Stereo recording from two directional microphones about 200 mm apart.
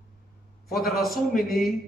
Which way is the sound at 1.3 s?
45° left (ahead or behind).